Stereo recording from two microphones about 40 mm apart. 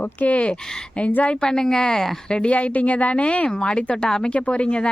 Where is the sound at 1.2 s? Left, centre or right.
Left.